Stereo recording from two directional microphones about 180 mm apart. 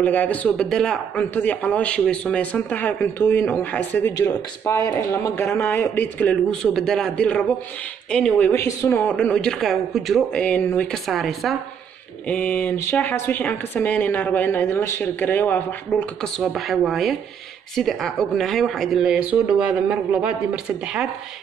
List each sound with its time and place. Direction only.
0.0 s speech: 10° left (ahead or behind)
16.2 s speech: centre (ahead or behind)